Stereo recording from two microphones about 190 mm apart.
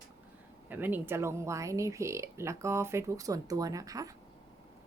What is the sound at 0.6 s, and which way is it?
Speech, 10° right (ahead or behind).